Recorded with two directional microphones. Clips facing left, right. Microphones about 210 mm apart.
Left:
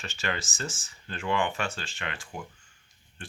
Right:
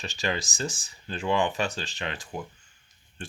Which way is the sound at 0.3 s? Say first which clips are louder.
Right 3 dB; 15° right (ahead or behind).